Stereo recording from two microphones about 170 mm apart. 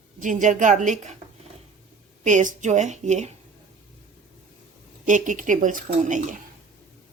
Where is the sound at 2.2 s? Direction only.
50° right (ahead or behind).